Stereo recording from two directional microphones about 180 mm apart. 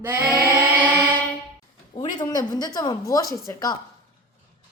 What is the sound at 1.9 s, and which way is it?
A woman's voice, 25° left (ahead or behind).